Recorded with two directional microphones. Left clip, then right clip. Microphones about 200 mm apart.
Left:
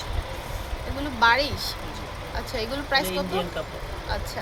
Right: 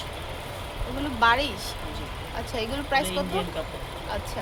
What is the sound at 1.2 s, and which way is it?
Speech, 5° left (ahead or behind).